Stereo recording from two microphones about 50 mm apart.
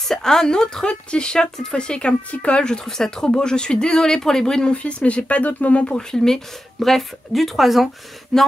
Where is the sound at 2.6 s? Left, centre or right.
Centre.